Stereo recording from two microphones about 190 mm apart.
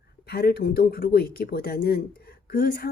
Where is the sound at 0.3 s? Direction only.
55° left (ahead or behind).